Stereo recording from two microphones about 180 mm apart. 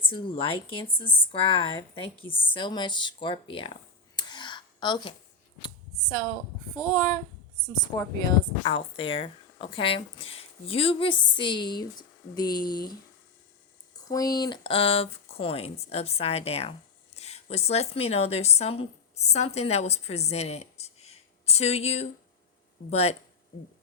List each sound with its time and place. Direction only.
0.0 s speech: 30° left (ahead or behind)
4.1 s a sound: 25° left (ahead or behind)
6.7 s speech: 25° left (ahead or behind)
14.1 s speech: 20° left (ahead or behind); by 23.1 s 35° left (ahead or behind)